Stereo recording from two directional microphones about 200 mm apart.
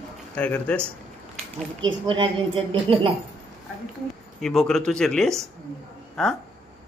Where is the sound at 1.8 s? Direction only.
25° right (ahead or behind).